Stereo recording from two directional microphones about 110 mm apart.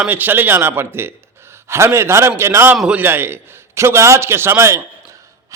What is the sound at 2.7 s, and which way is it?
Speech, 10° right (ahead or behind).